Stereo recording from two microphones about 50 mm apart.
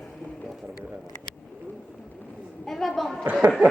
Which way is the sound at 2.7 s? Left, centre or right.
Centre.